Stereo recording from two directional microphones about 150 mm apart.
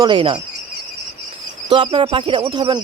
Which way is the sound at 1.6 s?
35° right (ahead or behind).